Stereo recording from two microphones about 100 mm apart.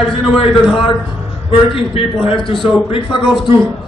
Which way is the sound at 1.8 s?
65° left (ahead or behind).